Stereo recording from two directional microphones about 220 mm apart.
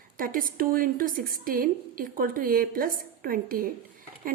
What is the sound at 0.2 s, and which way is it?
A woman's voice, 40° right (ahead or behind).